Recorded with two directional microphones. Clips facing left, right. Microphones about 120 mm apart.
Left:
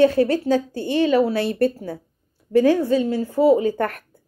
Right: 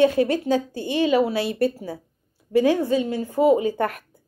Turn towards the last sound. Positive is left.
turn(degrees=-15)  # may be behind; listen again after turning